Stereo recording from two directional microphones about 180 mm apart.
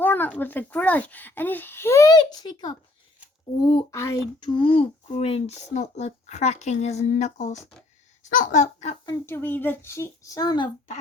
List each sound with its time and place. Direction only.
0.0 s a child's voice: 10° left (ahead or behind)
3.9 s speech: 15° left (ahead or behind); by 9.0 s 40° left (ahead or behind)
9.0 s a child's voice: 15° left (ahead or behind)